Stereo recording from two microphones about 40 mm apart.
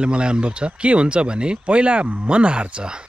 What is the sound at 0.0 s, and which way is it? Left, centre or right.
Speech, right.